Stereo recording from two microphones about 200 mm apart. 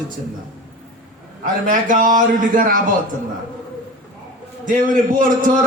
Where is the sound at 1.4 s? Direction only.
40° right (ahead or behind).